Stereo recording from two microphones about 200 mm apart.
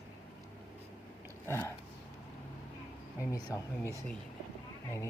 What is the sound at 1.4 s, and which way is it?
Speech, 10° left (ahead or behind).